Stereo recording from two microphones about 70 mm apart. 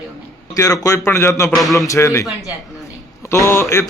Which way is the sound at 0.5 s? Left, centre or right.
Left.